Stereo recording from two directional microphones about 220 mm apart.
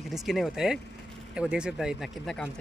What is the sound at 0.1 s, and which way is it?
Speech, centre (ahead or behind).